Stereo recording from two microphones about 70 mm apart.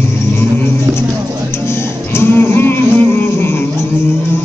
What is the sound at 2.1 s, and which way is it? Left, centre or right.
Music, left.